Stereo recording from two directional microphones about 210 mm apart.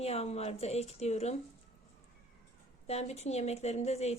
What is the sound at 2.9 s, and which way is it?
A woman's voice, 30° left (ahead or behind).